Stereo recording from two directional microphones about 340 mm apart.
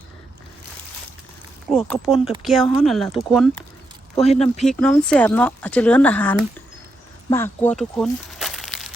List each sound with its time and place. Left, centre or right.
1.7 s speech: centre
4.1 s speech: centre
4.6 s speech: centre
7.3 s crumpling: centre